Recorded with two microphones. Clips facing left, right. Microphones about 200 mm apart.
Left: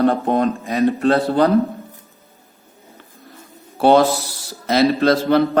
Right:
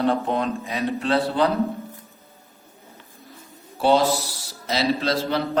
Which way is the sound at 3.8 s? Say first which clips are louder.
Left 5 dB; 55° left (ahead or behind).